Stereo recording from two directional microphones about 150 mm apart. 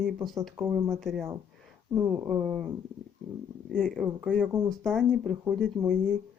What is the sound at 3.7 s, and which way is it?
Speech, 5° left (ahead or behind).